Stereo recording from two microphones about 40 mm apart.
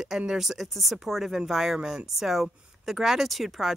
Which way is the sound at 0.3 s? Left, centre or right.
Centre.